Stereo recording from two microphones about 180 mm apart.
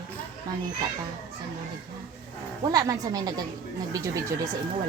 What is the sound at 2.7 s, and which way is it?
Speech, 20° right (ahead or behind).